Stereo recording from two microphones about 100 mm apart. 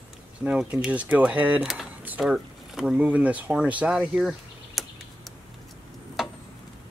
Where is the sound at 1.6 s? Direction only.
Centre (ahead or behind).